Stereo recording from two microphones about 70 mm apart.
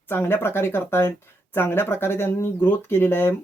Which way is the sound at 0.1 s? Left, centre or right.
Left.